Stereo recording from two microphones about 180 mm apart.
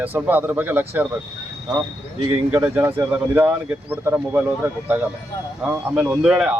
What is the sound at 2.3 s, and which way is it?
Speech, 10° right (ahead or behind).